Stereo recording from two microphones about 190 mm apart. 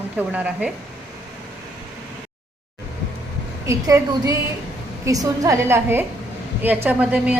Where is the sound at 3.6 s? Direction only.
15° right (ahead or behind).